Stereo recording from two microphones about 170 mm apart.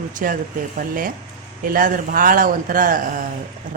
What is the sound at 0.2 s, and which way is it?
A woman's voice, 55° right (ahead or behind).